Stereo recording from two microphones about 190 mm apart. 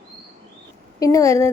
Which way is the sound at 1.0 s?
15° left (ahead or behind).